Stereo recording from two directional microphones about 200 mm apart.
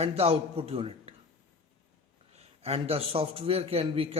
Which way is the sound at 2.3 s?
30° right (ahead or behind).